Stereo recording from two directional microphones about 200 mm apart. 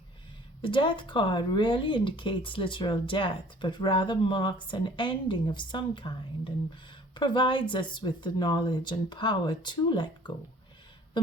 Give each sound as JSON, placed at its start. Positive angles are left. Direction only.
{"t": 0.6, "sound": "speech", "side_deg": 25}